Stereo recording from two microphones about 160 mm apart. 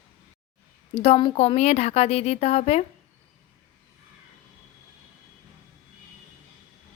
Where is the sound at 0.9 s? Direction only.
35° left (ahead or behind).